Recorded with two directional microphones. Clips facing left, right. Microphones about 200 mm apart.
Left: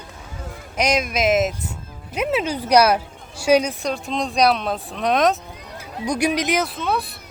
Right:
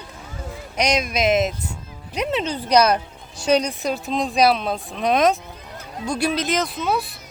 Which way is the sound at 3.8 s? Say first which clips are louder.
Right 1 dB; 5° right (ahead or behind).